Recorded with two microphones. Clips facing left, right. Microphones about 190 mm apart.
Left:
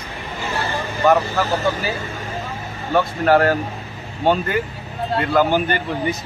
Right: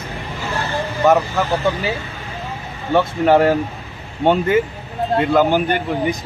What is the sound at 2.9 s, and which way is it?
Speech, 20° right (ahead or behind).